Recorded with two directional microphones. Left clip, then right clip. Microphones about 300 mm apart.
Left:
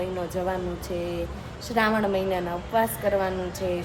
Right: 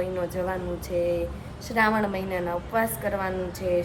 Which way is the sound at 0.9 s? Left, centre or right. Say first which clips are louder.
Right 7 dB; centre.